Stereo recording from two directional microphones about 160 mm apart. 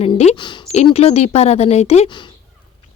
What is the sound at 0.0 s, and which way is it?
A woman's voice, 40° left (ahead or behind).